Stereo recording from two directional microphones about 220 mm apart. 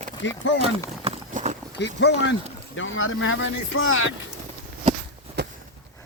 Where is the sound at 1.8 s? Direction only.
55° left (ahead or behind).